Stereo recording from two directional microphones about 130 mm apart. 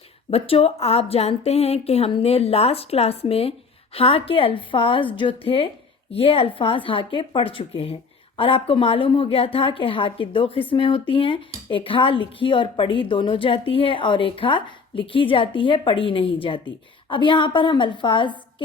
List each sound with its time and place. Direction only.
0.3 s a woman's voice: 50° left (ahead or behind)